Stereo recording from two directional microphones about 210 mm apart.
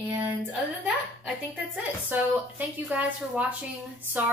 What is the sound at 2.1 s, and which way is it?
A woman's voice, 10° right (ahead or behind).